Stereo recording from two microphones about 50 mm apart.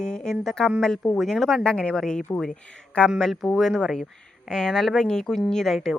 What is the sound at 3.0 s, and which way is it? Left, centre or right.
Speech, left.